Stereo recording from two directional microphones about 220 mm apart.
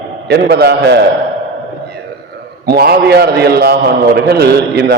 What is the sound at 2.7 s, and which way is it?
A man's voice, 45° right (ahead or behind).